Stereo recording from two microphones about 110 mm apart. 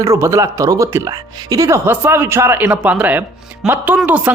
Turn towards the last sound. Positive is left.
turn(degrees=-15)  # may be behind; listen again after turning